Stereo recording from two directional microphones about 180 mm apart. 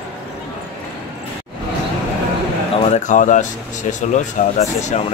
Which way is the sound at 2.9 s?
45° left (ahead or behind).